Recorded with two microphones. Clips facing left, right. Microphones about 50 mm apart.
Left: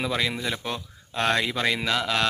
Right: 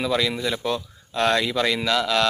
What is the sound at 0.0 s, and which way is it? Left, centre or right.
Speech, centre.